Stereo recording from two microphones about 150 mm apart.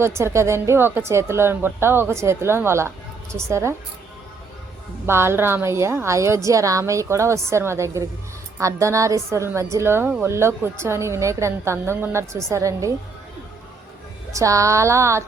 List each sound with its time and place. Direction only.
0.0 s a woman's voice: 15° right (ahead or behind)
5.0 s a woman's voice: 15° right (ahead or behind)
14.3 s a woman's voice: 20° right (ahead or behind)